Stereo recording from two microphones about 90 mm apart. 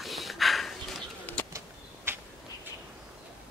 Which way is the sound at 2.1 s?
25° right (ahead or behind).